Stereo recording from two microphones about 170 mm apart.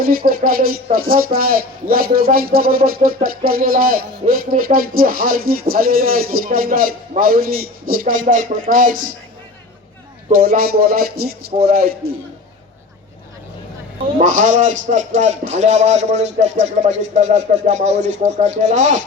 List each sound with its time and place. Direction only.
0.0 s speech: 60° right (ahead or behind)
10.3 s speech: 60° right (ahead or behind)
14.2 s speech: 50° right (ahead or behind)